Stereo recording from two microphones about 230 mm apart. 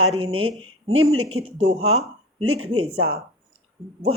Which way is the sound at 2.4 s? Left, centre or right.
Right.